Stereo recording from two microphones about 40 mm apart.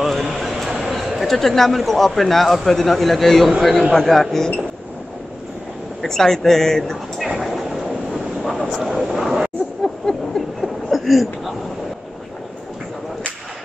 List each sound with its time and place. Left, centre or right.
0.0 s a sound: centre
1.8 s a man's voice: centre
6.0 s speech: centre
7.2 s vehicle: centre
8.5 s vehicle: centre
8.8 s a man's voice: centre
10.0 s a sound: centre